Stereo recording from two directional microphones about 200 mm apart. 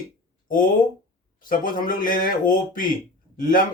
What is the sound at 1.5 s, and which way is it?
Speech, 45° left (ahead or behind).